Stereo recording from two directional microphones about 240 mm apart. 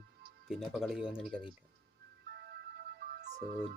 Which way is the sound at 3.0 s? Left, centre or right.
Right.